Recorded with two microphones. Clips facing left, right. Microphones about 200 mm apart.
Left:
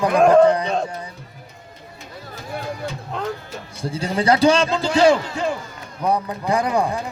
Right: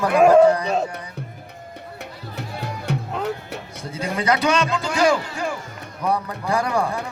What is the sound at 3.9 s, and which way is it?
A man's voice, 30° left (ahead or behind).